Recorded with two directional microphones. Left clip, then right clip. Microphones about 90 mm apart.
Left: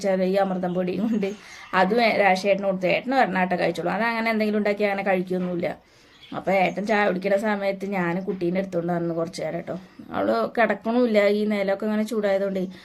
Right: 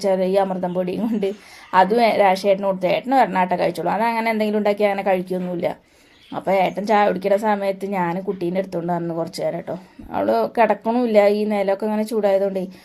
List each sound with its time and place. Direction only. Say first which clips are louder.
0.0 s speech: right 4 dB; 25° right (ahead or behind)
10.8 s speech: right 2 dB; 5° right (ahead or behind)
11.1 s speech: right 8 dB; 25° right (ahead or behind)